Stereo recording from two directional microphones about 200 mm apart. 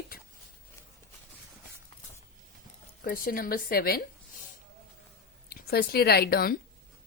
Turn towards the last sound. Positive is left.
turn(degrees=50)  # may be behind; listen again after turning